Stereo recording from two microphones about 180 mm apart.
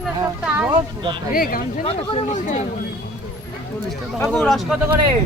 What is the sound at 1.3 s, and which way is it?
Speech, 55° left (ahead or behind).